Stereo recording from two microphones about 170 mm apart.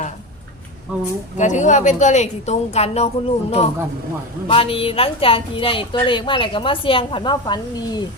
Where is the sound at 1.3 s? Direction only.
45° left (ahead or behind); by 8.1 s 25° left (ahead or behind).